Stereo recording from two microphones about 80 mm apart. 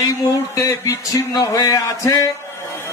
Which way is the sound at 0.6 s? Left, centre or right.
Left.